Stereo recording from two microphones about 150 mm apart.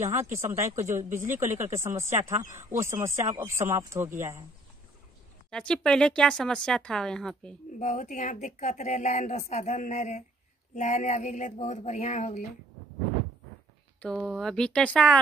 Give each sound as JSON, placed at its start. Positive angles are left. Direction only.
{"t": 0.0, "sound": "speech", "side_deg": -15}
{"t": 0.9, "sound": "speech", "side_deg": -55}
{"t": 1.8, "sound": "speech", "side_deg": -20}
{"t": 5.5, "sound": "speech", "side_deg": 5}
{"t": 7.8, "sound": "speech", "side_deg": 55}
{"t": 14.0, "sound": "speech", "side_deg": 0}